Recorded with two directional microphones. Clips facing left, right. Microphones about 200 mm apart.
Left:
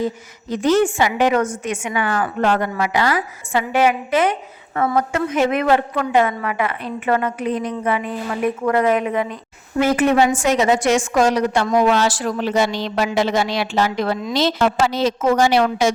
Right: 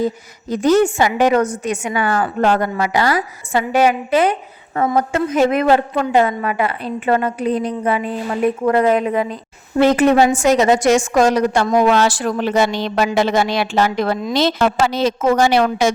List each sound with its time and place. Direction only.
0.5 s a woman's voice: 40° right (ahead or behind)
11.9 s a woman's voice: 55° right (ahead or behind)